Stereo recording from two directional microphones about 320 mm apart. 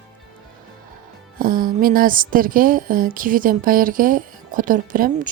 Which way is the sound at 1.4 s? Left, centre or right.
Right.